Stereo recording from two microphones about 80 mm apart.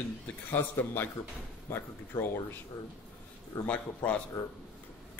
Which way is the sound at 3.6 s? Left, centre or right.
Centre.